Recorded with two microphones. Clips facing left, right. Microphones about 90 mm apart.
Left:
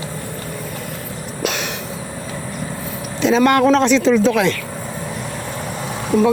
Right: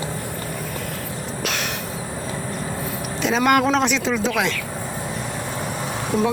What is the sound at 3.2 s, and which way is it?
Speech, 10° right (ahead or behind).